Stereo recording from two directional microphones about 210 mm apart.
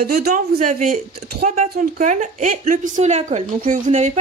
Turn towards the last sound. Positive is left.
turn(degrees=-35)  # may be behind; listen again after turning